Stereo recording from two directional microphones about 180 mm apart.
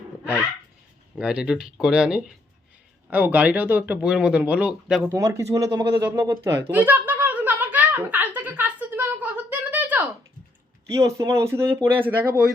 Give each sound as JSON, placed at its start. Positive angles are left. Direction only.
{"t": 1.1, "sound": "speech", "side_deg": -5}
{"t": 6.7, "sound": "a sound", "side_deg": -10}
{"t": 10.8, "sound": "speech", "side_deg": -15}